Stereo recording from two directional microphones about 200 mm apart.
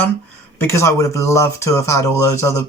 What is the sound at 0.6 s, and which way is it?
Speech, 15° left (ahead or behind).